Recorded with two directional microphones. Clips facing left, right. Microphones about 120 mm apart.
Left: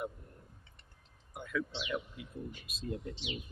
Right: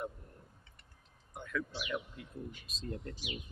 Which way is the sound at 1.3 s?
10° left (ahead or behind).